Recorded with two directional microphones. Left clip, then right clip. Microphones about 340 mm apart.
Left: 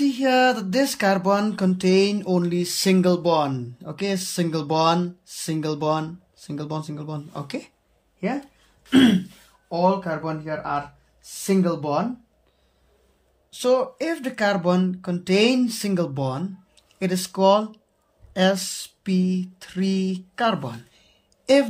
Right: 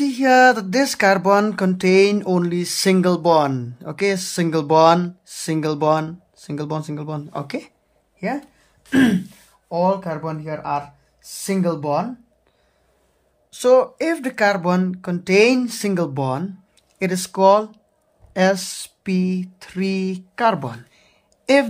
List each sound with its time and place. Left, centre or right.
0.0 s speech: centre
9.7 s speech: centre
13.5 s speech: centre
18.3 s a sound: centre